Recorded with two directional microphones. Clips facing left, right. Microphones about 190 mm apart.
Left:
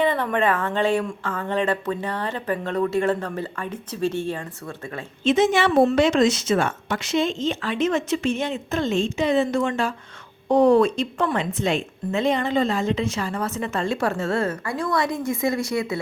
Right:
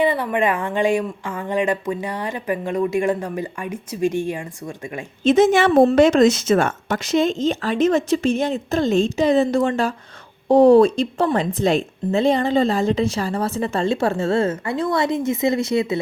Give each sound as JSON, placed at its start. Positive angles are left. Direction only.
{"t": 0.0, "sound": "speech", "side_deg": -10}
{"t": 5.2, "sound": "a woman's voice", "side_deg": -45}